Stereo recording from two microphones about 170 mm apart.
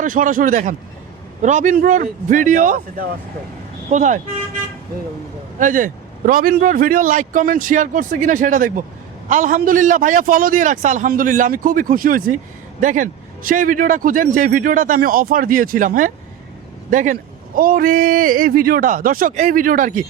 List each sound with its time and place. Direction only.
0.0 s speech: 50° right (ahead or behind)
5.5 s speech: 50° right (ahead or behind)